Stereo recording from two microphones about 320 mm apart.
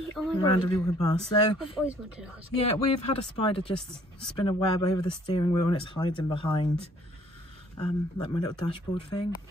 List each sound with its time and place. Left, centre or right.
0.1 s speech: centre
2.6 s speech: centre
3.7 s speech: centre
4.5 s speech: centre